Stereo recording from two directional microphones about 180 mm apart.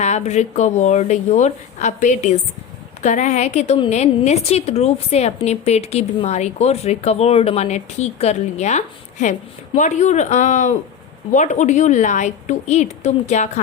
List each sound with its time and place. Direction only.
0.0 s a woman's voice: 40° left (ahead or behind)